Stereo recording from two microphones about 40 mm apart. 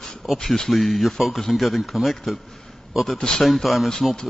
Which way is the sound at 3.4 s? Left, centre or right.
Centre.